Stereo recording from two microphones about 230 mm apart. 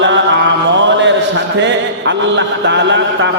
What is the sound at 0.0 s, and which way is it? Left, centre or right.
Mantra, right.